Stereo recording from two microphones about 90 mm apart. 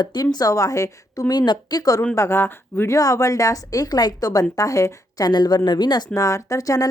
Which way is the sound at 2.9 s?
40° left (ahead or behind).